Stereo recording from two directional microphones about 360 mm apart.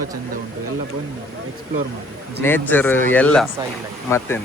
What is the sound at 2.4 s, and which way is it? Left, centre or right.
Speech, centre.